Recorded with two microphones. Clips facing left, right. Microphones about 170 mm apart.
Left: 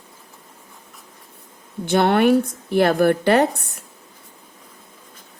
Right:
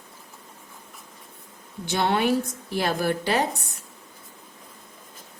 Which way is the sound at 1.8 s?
60° left (ahead or behind).